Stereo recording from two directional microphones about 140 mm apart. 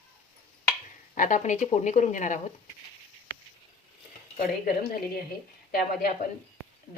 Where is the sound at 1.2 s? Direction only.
60° left (ahead or behind).